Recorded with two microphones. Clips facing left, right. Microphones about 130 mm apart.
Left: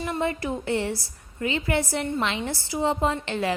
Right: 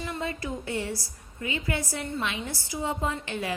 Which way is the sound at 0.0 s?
50° left (ahead or behind).